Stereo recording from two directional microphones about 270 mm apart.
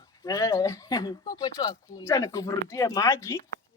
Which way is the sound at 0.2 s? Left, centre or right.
Centre.